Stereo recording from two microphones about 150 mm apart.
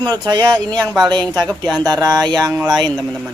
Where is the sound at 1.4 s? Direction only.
10° left (ahead or behind).